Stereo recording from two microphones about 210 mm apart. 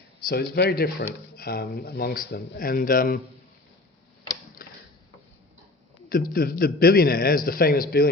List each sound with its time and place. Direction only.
0.2 s speech: 50° left (ahead or behind)
4.6 s tick-tock: 45° left (ahead or behind)
6.1 s speech: 45° left (ahead or behind)